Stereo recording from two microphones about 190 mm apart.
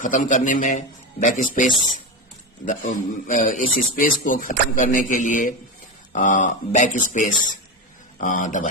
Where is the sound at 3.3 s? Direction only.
45° left (ahead or behind).